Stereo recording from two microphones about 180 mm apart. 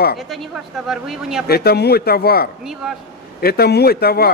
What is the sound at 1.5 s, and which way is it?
Speech, 60° left (ahead or behind).